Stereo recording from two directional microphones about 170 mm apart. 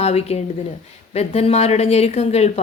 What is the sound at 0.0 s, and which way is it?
Speech, 40° left (ahead or behind).